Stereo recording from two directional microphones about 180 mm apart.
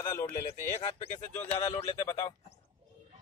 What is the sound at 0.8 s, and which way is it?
Speech, 35° left (ahead or behind).